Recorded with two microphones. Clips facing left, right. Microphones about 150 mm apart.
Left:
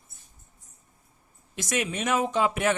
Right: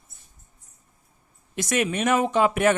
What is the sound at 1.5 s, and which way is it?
Speech, 60° right (ahead or behind).